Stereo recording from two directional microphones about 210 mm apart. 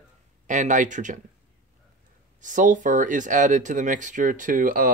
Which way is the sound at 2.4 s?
35° right (ahead or behind).